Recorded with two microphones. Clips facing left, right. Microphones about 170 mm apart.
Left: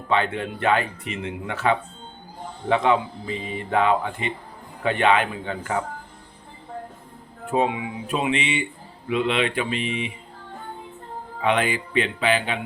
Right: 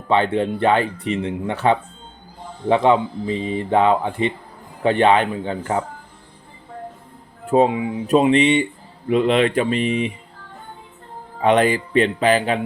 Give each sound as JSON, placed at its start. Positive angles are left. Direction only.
{"t": 0.1, "sound": "speech", "side_deg": -30}
{"t": 7.5, "sound": "speech", "side_deg": -35}
{"t": 11.3, "sound": "speech", "side_deg": -40}